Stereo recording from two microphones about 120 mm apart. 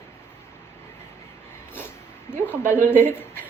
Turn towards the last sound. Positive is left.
turn(degrees=20)  # may be behind; listen again after turning